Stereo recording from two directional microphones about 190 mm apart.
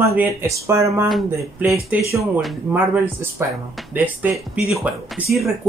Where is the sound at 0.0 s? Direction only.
10° right (ahead or behind).